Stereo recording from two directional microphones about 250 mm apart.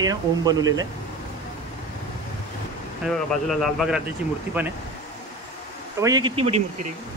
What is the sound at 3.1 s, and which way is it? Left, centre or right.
Speech, centre.